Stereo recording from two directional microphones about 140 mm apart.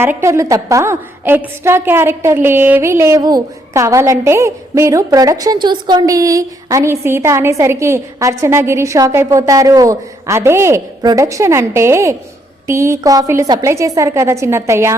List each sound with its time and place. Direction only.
0.0 s a woman's voice: 20° right (ahead or behind)